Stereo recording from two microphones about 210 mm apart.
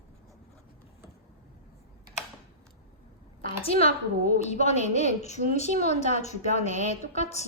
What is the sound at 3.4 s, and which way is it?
A woman's voice, 30° left (ahead or behind).